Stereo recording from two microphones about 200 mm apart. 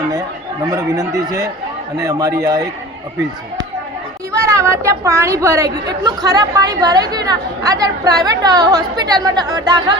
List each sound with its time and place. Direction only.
0.7 s speech: 20° right (ahead or behind)
4.3 s a woman's voice: 15° right (ahead or behind)